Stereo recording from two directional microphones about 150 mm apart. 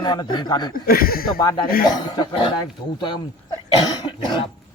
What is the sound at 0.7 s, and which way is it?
Speech, 75° left (ahead or behind).